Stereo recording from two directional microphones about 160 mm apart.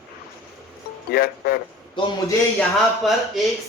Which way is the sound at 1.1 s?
70° left (ahead or behind).